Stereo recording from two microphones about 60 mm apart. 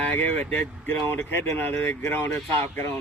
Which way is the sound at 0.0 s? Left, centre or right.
Left.